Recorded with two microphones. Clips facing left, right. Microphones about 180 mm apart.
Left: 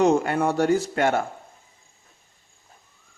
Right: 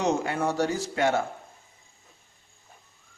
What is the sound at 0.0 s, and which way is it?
Speech, 55° left (ahead or behind).